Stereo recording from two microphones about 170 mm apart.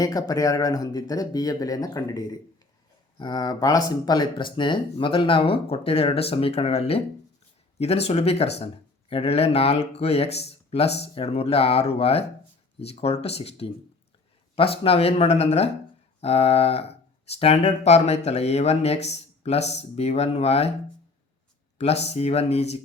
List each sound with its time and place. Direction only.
0.0 s speech: 20° left (ahead or behind); by 20.7 s 40° left (ahead or behind)
21.8 s speech: 40° left (ahead or behind)